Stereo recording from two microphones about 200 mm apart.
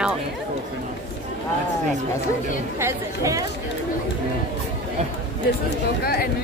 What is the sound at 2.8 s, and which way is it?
Speech, 15° right (ahead or behind).